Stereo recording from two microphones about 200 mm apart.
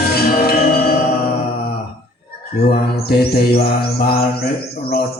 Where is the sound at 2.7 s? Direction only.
50° left (ahead or behind).